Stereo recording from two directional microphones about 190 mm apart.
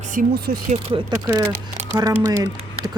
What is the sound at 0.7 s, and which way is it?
Speech, 35° right (ahead or behind).